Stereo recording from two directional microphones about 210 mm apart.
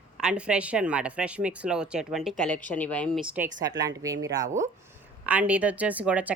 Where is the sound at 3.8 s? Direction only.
15° right (ahead or behind).